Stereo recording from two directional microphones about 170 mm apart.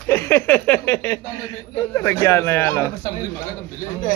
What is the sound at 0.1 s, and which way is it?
Speech, 15° left (ahead or behind).